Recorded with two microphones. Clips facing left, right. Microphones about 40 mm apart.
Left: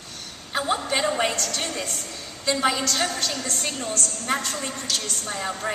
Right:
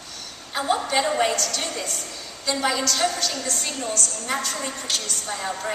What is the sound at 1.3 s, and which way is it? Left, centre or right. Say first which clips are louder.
Speech: right 1 dB; left.